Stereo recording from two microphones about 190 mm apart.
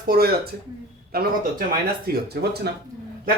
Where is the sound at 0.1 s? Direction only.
55° right (ahead or behind).